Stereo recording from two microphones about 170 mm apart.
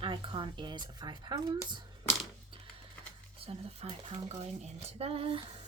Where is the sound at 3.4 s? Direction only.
35° right (ahead or behind).